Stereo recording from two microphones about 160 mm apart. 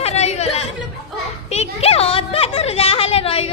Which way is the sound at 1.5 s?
40° left (ahead or behind).